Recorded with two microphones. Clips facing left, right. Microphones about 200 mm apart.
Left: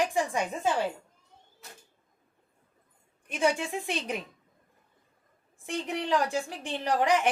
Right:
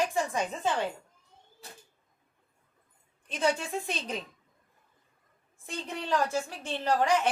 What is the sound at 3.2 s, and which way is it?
Speech, 15° left (ahead or behind).